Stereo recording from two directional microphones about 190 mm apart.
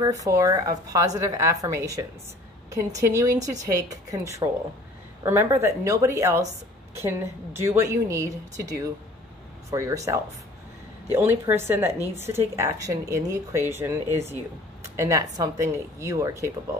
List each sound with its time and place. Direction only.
0.0 s speech: 15° right (ahead or behind)
15.0 s speech: 15° right (ahead or behind)